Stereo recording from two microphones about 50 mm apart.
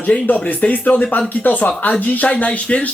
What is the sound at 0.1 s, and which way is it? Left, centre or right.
Speech, left.